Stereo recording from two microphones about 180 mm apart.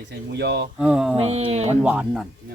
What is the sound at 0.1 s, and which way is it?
Speech, 70° right (ahead or behind).